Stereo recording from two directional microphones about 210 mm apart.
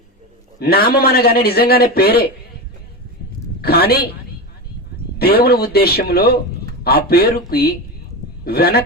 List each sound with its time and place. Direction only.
0.6 s a man's voice: 45° left (ahead or behind)
3.6 s a man's voice: 50° left (ahead or behind)
5.2 s a man's voice: 50° left (ahead or behind)